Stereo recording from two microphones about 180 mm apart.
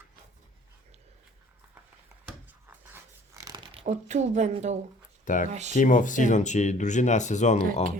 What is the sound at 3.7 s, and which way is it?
A woman's voice, 40° right (ahead or behind).